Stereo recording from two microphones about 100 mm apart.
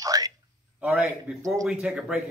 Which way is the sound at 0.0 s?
35° right (ahead or behind).